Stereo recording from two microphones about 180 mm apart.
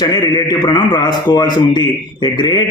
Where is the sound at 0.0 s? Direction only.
20° left (ahead or behind).